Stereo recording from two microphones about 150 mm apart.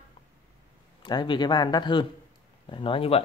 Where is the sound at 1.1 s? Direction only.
30° left (ahead or behind).